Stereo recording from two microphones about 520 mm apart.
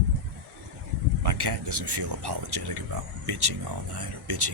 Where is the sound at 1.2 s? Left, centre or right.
Right.